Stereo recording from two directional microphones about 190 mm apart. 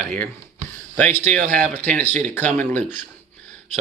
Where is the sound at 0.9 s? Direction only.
10° left (ahead or behind).